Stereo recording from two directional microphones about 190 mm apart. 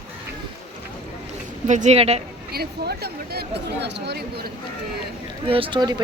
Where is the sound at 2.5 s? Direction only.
55° right (ahead or behind).